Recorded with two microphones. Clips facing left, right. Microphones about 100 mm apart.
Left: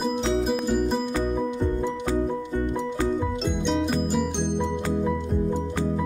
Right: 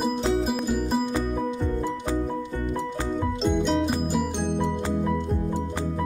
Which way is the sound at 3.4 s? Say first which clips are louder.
Right 2 dB; centre (ahead or behind).